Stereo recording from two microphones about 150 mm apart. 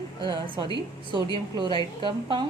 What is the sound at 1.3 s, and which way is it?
A woman's voice, 30° right (ahead or behind).